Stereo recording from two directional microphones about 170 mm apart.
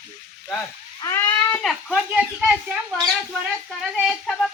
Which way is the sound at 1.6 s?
5° right (ahead or behind).